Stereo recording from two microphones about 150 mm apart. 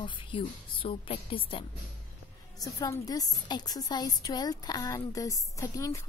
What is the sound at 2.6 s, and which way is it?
A woman's voice, 25° left (ahead or behind).